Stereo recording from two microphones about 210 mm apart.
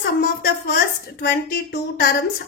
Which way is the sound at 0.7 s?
50° left (ahead or behind).